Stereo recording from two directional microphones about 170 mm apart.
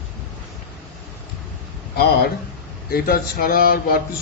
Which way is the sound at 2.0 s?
65° left (ahead or behind).